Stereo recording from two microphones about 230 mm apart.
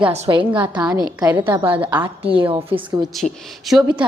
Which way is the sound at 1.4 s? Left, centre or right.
Right.